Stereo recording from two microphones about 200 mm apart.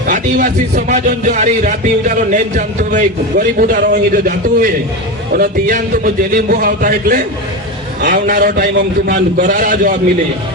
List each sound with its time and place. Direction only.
0.1 s speech: 40° right (ahead or behind)